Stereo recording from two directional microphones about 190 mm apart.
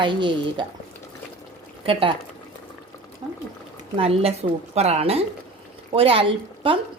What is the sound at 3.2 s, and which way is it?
Water, 30° right (ahead or behind).